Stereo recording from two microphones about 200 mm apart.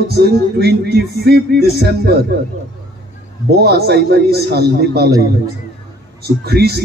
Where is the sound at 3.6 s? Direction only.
50° right (ahead or behind).